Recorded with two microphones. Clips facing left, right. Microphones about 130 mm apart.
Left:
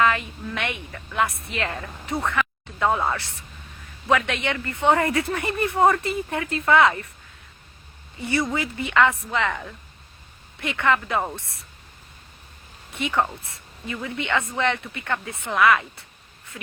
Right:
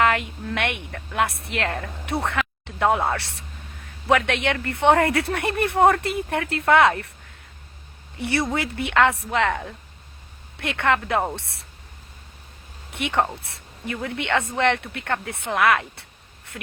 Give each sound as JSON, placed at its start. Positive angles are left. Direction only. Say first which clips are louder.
{"t": 0.0, "sound": "speech", "louder": "right 1 dB", "side_deg": -65}
{"t": 8.2, "sound": "speech", "louder": "right 1 dB", "side_deg": -70}
{"t": 10.6, "sound": "speech", "louder": "even", "side_deg": -70}
{"t": 12.9, "sound": "speech", "louder": "right 1 dB", "side_deg": -70}